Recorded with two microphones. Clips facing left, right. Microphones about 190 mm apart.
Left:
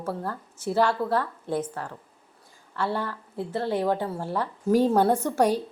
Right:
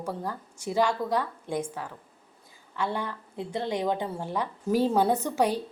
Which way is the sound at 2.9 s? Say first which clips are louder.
Left 3 dB; 15° right (ahead or behind).